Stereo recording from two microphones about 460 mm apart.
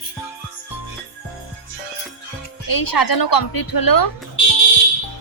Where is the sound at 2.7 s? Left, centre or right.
Left.